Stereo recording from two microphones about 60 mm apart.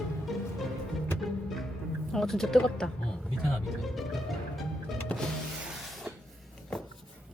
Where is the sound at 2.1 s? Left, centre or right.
Centre.